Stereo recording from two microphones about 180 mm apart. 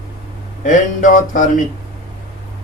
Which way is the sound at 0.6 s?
45° left (ahead or behind).